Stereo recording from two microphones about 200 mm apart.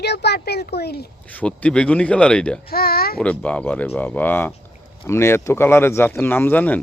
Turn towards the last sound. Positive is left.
turn(degrees=10)  # may be behind; listen again after turning